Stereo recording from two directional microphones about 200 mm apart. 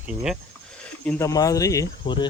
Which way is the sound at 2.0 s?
25° left (ahead or behind).